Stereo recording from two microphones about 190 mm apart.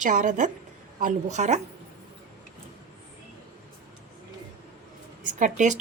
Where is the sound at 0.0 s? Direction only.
45° right (ahead or behind).